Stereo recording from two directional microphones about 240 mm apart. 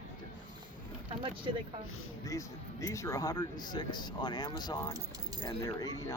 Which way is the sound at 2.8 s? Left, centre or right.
Centre.